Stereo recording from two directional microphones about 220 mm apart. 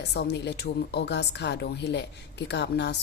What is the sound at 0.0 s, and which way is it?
A woman's voice, 50° left (ahead or behind).